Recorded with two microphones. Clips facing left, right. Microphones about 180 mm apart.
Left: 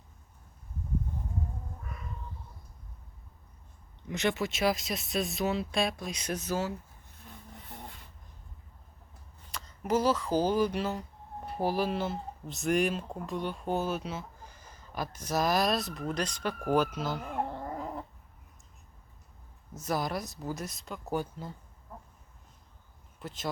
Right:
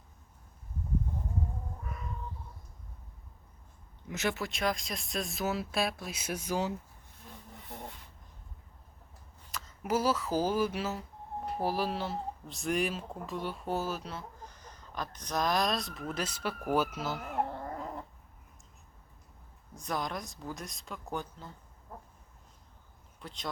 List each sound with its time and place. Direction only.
4.1 s speech: 5° right (ahead or behind)
9.5 s speech: 5° right (ahead or behind)
19.7 s speech: 5° left (ahead or behind)
23.2 s speech: 5° left (ahead or behind)